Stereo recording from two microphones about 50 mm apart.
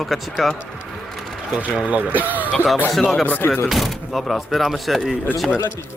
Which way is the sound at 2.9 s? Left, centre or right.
Centre.